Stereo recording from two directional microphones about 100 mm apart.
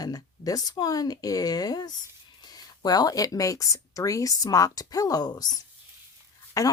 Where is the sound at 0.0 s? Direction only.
40° left (ahead or behind).